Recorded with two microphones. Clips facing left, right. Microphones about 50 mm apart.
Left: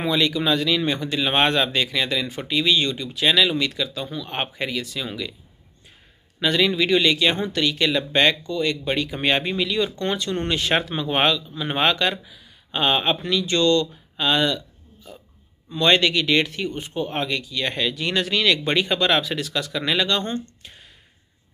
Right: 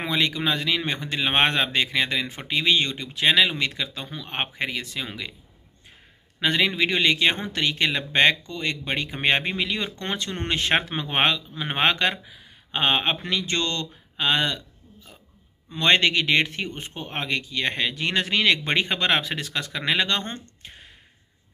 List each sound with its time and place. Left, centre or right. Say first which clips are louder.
0.0 s speech: left 3 dB; right
6.4 s speech: left 2 dB; right
15.7 s speech: left 2 dB; right
20.6 s a sound: right 1 dB; right